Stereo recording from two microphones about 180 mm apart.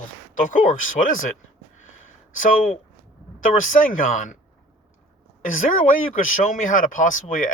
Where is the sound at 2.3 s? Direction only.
45° left (ahead or behind).